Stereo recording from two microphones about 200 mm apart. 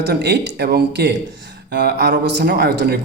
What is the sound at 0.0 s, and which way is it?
Speech, 55° right (ahead or behind).